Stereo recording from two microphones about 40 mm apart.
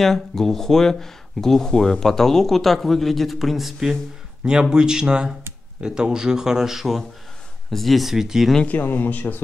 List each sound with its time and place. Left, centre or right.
0.0 s speech: centre
4.5 s speech: centre
8.1 s speech: centre
8.8 s speech: left